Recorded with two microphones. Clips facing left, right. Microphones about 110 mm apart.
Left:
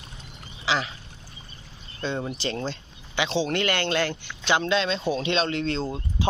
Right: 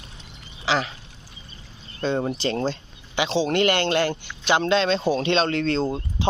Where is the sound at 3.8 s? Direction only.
45° right (ahead or behind).